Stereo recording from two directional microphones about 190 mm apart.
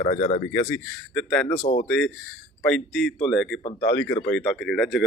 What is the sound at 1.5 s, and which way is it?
Speech, 35° left (ahead or behind).